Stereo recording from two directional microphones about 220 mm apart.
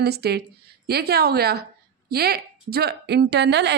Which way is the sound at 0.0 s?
45° right (ahead or behind).